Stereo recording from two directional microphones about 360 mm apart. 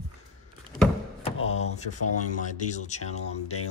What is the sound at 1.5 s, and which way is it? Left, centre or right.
Speech, centre.